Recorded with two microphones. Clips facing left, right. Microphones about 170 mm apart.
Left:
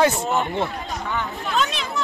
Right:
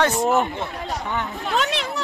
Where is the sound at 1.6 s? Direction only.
70° right (ahead or behind).